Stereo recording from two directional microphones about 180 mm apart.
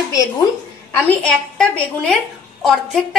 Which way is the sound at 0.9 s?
5° left (ahead or behind).